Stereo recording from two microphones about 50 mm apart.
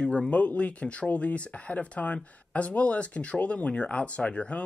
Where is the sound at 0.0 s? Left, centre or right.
Left.